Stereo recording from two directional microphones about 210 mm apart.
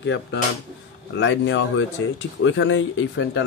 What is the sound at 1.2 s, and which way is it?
A man's voice, 60° left (ahead or behind).